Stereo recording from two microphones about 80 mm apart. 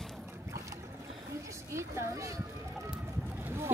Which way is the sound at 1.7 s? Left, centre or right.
Right.